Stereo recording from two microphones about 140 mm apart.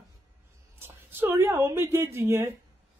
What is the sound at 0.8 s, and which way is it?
A woman's voice, 15° right (ahead or behind).